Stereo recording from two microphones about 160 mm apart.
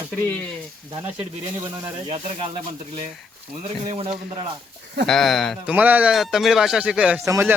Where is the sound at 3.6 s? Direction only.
40° right (ahead or behind).